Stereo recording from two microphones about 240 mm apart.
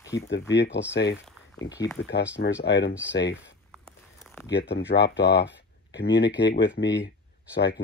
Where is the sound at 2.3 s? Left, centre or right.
Left.